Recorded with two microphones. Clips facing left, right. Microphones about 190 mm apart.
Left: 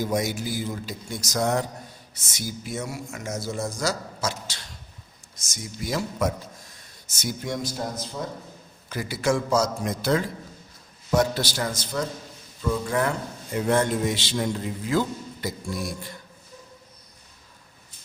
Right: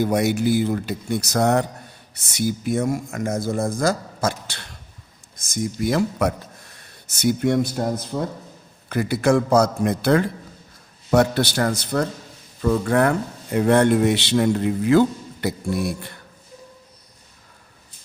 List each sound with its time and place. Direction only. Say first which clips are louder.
0.0 s a man's voice: right 7 dB; 65° right (ahead or behind)